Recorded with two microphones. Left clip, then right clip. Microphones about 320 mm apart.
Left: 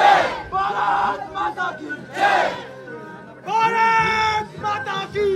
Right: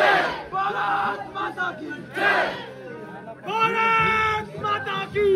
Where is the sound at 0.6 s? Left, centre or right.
Left.